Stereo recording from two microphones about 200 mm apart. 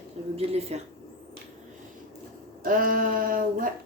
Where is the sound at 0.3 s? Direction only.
30° right (ahead or behind).